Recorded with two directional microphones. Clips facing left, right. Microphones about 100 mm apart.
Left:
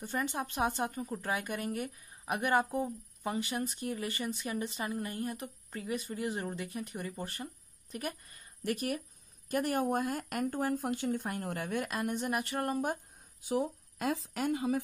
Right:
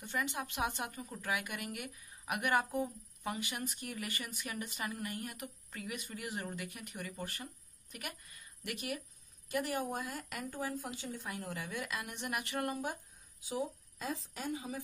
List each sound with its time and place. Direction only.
0.0 s a woman's voice: 35° left (ahead or behind); by 14.8 s 65° left (ahead or behind)